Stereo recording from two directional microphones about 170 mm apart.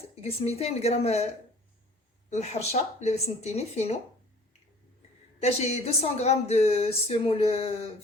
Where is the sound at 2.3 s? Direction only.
40° left (ahead or behind).